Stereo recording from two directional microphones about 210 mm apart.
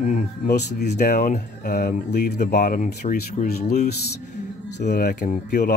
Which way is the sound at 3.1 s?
50° left (ahead or behind).